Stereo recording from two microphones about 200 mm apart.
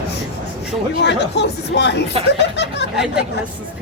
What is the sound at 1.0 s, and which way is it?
A woman's voice, 60° left (ahead or behind).